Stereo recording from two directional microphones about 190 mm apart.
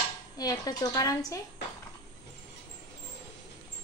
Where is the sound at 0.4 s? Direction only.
20° left (ahead or behind).